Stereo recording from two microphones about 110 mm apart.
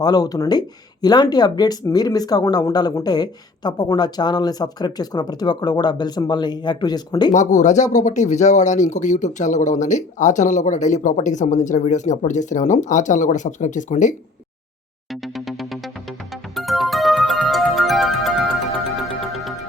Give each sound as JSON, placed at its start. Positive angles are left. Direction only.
{"t": 0.0, "sound": "speech", "side_deg": 35}
{"t": 7.3, "sound": "speech", "side_deg": 90}
{"t": 15.1, "sound": "music", "side_deg": 0}